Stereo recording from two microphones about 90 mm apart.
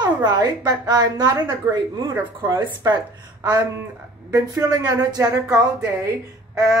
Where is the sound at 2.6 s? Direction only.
55° right (ahead or behind).